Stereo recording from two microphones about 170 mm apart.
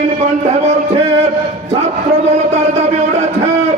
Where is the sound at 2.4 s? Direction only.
40° right (ahead or behind).